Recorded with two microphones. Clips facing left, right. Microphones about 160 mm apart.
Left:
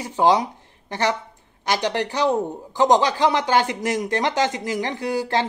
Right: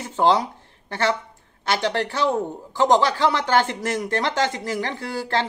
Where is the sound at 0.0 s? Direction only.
15° left (ahead or behind).